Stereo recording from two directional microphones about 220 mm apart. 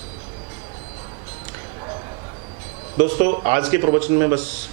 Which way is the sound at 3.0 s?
15° right (ahead or behind).